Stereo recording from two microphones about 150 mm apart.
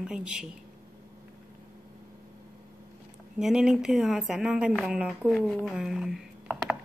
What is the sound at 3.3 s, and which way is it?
A woman's voice, 5° right (ahead or behind).